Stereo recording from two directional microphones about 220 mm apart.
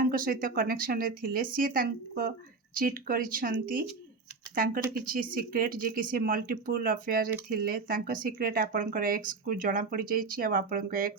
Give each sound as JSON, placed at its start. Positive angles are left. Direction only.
{"t": 0.0, "sound": "speech", "side_deg": -40}